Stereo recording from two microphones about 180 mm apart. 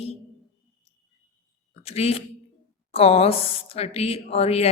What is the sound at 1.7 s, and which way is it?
A woman's voice, 35° left (ahead or behind).